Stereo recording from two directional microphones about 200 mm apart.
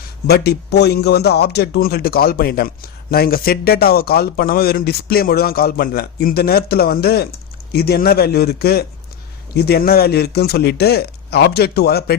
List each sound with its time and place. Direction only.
0.3 s speech: 55° left (ahead or behind)